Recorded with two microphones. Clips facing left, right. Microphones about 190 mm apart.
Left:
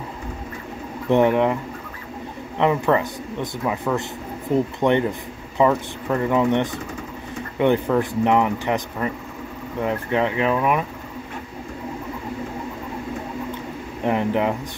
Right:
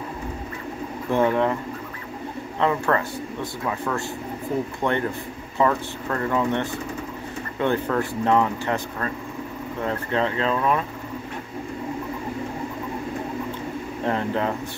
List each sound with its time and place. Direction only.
1.1 s speech: 20° left (ahead or behind)
2.6 s speech: 15° left (ahead or behind)
14.0 s speech: 15° left (ahead or behind)